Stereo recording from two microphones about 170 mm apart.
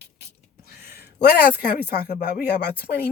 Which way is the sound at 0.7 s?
65° left (ahead or behind).